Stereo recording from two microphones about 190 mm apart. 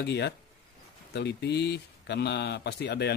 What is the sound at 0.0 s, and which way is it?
Speech, 60° left (ahead or behind).